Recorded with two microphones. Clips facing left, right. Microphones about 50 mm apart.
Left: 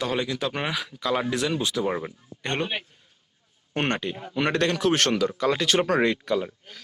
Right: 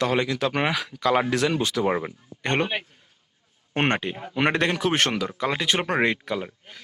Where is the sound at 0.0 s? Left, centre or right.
Right.